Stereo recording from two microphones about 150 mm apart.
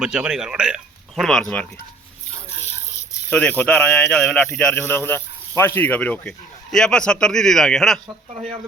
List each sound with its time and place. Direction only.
0.0 s speech: 5° right (ahead or behind)
3.2 s speech: 10° left (ahead or behind)
8.3 s speech: 50° right (ahead or behind)